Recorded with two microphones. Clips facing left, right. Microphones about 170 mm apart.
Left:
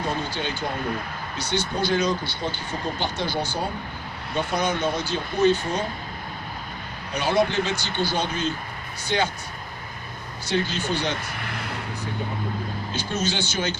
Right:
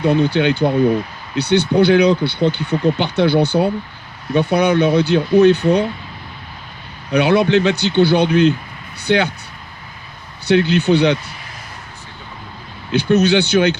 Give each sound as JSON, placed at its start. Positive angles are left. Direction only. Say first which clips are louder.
{"t": 0.0, "sound": "speech", "louder": "right 13 dB", "side_deg": -65}
{"t": 7.1, "sound": "speech", "louder": "right 9 dB", "side_deg": -65}
{"t": 10.4, "sound": "speech", "louder": "right 11 dB", "side_deg": -65}
{"t": 11.3, "sound": "a sound", "louder": "left 4 dB", "side_deg": 60}
{"t": 12.9, "sound": "speech", "louder": "right 15 dB", "side_deg": -65}